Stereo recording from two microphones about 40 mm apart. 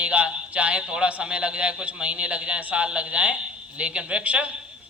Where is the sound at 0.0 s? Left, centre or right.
Right.